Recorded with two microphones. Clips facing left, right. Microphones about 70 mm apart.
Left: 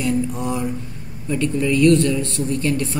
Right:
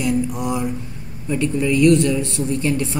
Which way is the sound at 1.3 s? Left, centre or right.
Centre.